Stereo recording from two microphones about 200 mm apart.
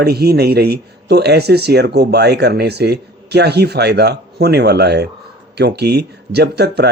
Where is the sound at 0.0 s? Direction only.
55° right (ahead or behind).